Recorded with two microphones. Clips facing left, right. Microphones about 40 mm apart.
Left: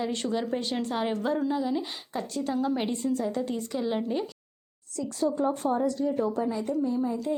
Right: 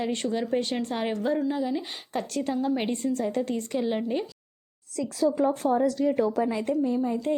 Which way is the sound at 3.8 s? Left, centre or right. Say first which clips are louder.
Left 1 dB; centre.